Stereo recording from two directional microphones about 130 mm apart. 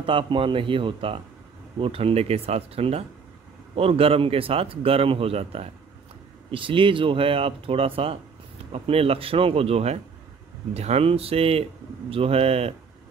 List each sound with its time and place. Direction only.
0.0 s a man's voice: 40° right (ahead or behind)